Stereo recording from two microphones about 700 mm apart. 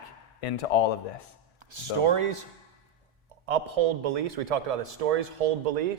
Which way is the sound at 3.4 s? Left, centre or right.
Right.